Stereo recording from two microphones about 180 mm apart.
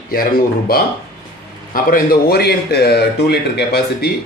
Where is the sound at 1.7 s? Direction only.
50° left (ahead or behind).